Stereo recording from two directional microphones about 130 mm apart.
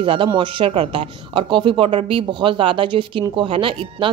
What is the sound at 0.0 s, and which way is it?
A woman's voice, 40° right (ahead or behind).